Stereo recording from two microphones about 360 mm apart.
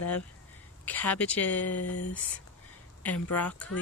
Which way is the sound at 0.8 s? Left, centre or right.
Centre.